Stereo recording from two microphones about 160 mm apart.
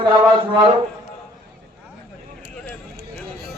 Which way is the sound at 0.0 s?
35° right (ahead or behind).